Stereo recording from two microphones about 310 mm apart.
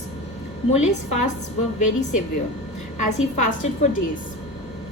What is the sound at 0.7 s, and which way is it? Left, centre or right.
Speech, left.